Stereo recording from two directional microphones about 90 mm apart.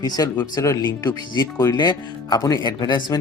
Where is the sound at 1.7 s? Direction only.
50° left (ahead or behind).